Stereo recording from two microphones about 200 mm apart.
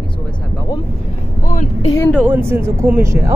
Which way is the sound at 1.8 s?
15° left (ahead or behind).